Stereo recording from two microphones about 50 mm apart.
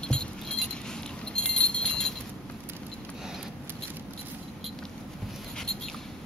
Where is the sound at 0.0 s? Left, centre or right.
Centre.